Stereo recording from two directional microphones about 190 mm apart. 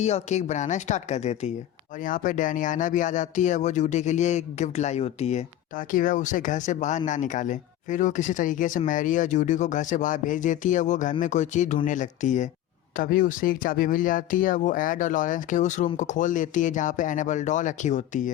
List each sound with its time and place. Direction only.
0.0 s speech: 35° left (ahead or behind)